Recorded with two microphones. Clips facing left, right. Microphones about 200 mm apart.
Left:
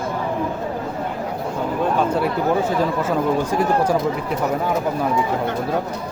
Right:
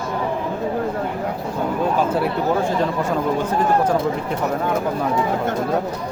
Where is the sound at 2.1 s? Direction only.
Centre (ahead or behind).